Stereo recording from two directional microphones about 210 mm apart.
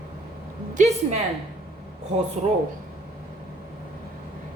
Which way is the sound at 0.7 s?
35° right (ahead or behind).